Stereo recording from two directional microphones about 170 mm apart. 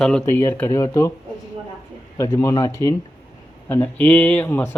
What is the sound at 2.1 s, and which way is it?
Speech, 20° left (ahead or behind).